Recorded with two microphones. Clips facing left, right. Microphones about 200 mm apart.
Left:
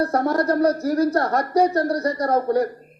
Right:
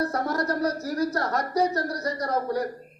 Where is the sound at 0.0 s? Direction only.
55° left (ahead or behind).